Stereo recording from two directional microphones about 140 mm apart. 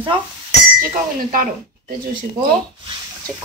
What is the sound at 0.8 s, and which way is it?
Speech, 85° right.